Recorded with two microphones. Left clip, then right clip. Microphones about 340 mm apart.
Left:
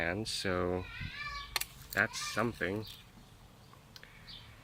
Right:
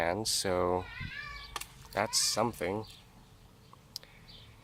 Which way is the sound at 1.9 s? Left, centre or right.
Centre.